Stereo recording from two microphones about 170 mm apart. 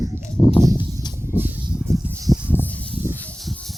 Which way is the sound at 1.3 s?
10° right (ahead or behind).